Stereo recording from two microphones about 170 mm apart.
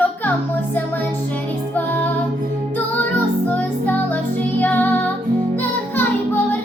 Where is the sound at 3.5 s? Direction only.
10° left (ahead or behind).